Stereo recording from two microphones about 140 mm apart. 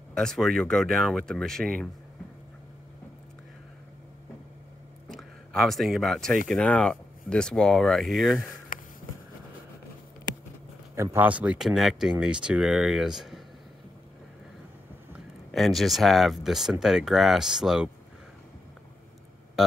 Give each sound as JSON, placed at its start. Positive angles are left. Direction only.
{"t": 0.1, "sound": "speech", "side_deg": 5}
{"t": 5.0, "sound": "speech", "side_deg": 0}
{"t": 8.7, "sound": "a sound", "side_deg": 75}
{"t": 11.1, "sound": "speech", "side_deg": -10}
{"t": 15.1, "sound": "speech", "side_deg": 0}